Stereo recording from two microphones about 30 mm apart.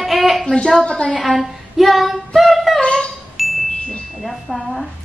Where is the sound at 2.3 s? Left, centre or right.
Centre.